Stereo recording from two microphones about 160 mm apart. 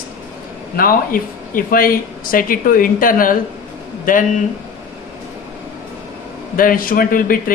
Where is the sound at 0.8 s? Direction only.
60° left (ahead or behind).